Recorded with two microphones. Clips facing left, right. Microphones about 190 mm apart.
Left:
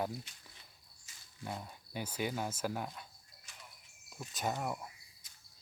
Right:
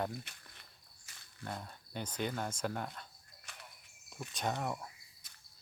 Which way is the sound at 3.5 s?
60° right (ahead or behind).